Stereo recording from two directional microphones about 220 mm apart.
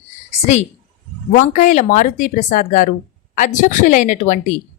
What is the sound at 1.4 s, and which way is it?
A woman's voice, 35° left (ahead or behind).